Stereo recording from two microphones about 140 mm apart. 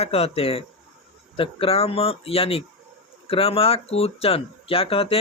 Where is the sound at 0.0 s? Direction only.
45° left (ahead or behind).